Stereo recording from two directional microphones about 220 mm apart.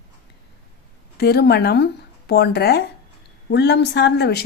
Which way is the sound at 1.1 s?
45° left (ahead or behind).